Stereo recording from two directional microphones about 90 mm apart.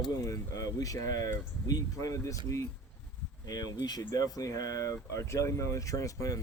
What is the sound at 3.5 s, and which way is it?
Speech, 45° left (ahead or behind).